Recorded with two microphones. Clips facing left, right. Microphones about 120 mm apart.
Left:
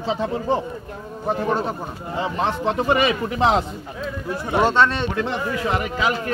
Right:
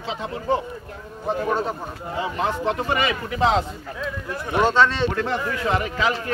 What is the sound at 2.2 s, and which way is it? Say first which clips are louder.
Speech: left 2 dB; 25° left (ahead or behind).